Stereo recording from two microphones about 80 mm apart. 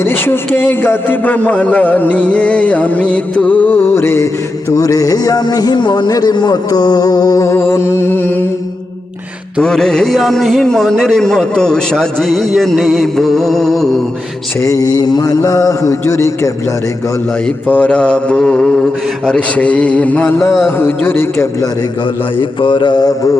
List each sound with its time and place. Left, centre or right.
0.0 s a man's voice: left
4.7 s speech: left
9.6 s speech: centre
14.6 s speech: left
15.4 s a sound: left
17.7 s speech: centre
20.4 s a sound: left
22.4 s mantra: left